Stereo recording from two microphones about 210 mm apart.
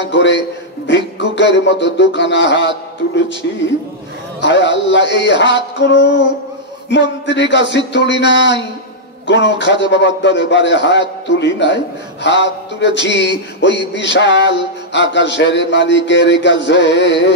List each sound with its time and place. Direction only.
0.1 s a man's voice: 55° left (ahead or behind)
4.4 s a man's voice: 55° left (ahead or behind)